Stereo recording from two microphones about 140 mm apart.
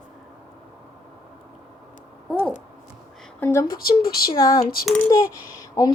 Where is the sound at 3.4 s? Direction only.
20° left (ahead or behind).